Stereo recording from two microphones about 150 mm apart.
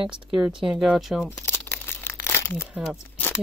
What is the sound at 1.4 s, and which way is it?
Crumpling, 15° left (ahead or behind).